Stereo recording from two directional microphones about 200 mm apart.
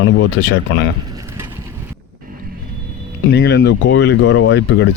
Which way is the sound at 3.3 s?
55° left (ahead or behind).